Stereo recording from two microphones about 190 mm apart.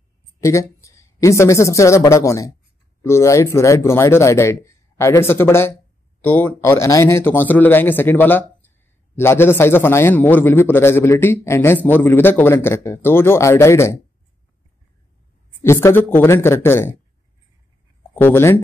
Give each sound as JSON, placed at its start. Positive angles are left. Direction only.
{"t": 0.4, "sound": "a man's voice", "side_deg": 15}
{"t": 15.6, "sound": "a man's voice", "side_deg": 15}
{"t": 18.1, "sound": "a man's voice", "side_deg": 10}